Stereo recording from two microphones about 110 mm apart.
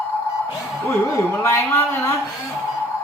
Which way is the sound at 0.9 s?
20° left (ahead or behind).